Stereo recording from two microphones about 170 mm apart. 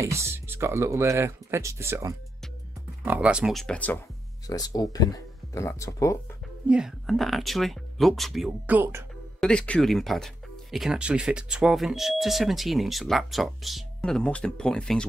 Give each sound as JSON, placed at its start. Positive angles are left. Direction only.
{"t": 0.0, "sound": "speech", "side_deg": -15}
{"t": 3.1, "sound": "speech", "side_deg": -5}
{"t": 4.5, "sound": "speech", "side_deg": 20}
{"t": 6.7, "sound": "speech", "side_deg": 0}
{"t": 9.4, "sound": "speech", "side_deg": 5}